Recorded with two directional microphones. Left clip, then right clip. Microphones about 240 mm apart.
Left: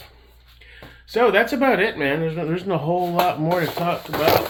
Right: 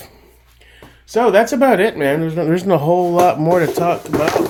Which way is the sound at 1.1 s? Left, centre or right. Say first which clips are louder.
Right 5 dB; right.